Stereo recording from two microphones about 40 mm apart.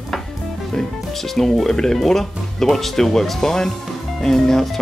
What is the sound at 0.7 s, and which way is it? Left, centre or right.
Speech, centre.